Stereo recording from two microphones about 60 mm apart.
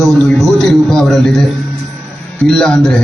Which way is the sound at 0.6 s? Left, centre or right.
Centre.